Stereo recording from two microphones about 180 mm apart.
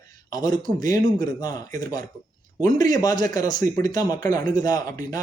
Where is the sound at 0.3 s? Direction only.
20° left (ahead or behind).